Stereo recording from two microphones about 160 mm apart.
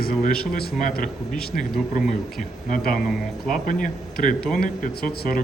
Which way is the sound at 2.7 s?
60° left (ahead or behind).